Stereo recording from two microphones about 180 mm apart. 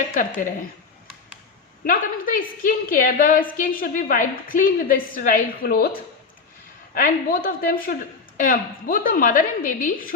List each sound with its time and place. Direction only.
1.8 s a woman's voice: 50° left (ahead or behind)
6.9 s a woman's voice: 50° left (ahead or behind)